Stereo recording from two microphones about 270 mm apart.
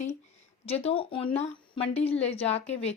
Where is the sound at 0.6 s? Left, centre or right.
Left.